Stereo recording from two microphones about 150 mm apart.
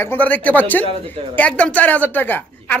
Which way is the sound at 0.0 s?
15° left (ahead or behind).